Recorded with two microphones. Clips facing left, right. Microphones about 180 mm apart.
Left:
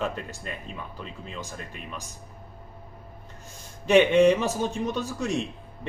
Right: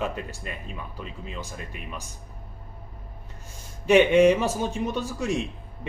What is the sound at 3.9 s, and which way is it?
Speech, 10° right (ahead or behind).